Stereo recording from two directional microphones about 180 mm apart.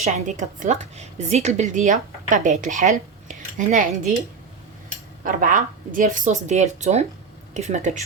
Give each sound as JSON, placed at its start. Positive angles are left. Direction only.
{"t": 0.0, "sound": "a woman's voice", "side_deg": -40}
{"t": 3.2, "sound": "dishes", "side_deg": -45}
{"t": 5.2, "sound": "a woman's voice", "side_deg": -45}